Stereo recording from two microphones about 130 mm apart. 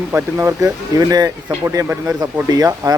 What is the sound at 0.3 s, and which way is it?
Speech, 25° right (ahead or behind).